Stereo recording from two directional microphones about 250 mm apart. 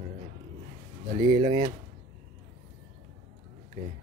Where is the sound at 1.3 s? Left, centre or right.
Centre.